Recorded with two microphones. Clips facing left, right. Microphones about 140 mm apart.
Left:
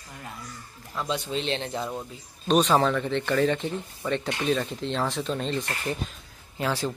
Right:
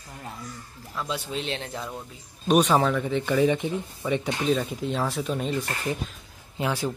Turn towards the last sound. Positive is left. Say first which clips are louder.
# even
turn(degrees=-10)  # may be behind; listen again after turning